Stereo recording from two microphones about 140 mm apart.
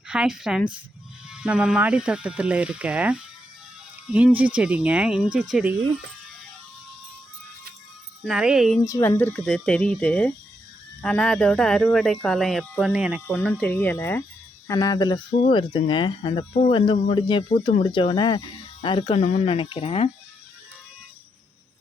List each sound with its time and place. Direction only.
0.1 s speech: 5° right (ahead or behind)
8.2 s speech: 5° right (ahead or behind)
8.9 s speech: 20° left (ahead or behind); by 13.2 s 5° right (ahead or behind)
13.2 s speech: 10° left (ahead or behind); by 15.2 s 25° left (ahead or behind)
15.4 s speech: 40° left (ahead or behind)
19.2 s speech: 50° left (ahead or behind)